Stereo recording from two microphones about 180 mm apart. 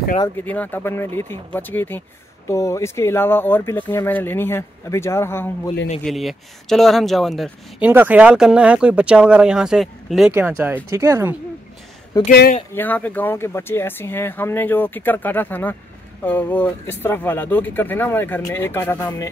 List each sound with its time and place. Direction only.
0.4 s speech: 10° left (ahead or behind)
6.0 s speech: centre (ahead or behind)
7.9 s speech: 10° right (ahead or behind)
10.3 s speech: 10° right (ahead or behind)
12.3 s speech: 55° left (ahead or behind)
12.7 s speech: 10° left (ahead or behind)